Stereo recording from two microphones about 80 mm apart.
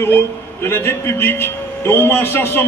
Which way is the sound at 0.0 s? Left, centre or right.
Left.